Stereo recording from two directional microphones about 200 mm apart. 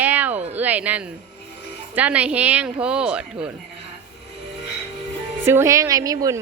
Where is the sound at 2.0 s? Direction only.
5° right (ahead or behind).